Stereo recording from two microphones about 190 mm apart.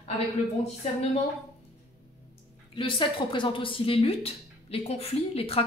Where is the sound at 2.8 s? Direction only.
25° left (ahead or behind).